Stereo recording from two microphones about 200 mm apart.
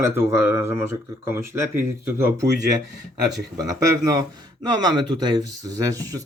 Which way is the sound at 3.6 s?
15° right (ahead or behind).